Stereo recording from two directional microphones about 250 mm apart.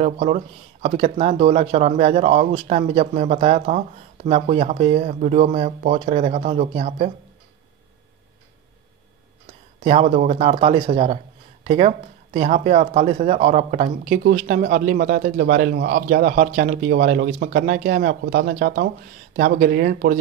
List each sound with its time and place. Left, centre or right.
0.0 s speech: right
9.8 s a man's voice: right